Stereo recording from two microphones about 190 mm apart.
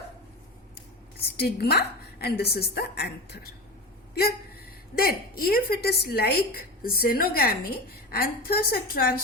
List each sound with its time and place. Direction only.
1.4 s a woman's voice: 60° left (ahead or behind)
4.9 s a woman's voice: 55° left (ahead or behind)